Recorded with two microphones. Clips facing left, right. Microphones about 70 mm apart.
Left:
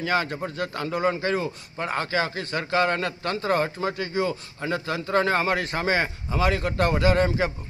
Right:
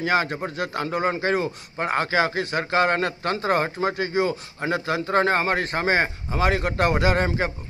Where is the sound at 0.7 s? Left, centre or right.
Right.